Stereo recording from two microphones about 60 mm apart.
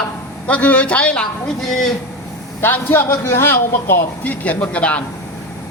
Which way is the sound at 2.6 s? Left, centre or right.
Left.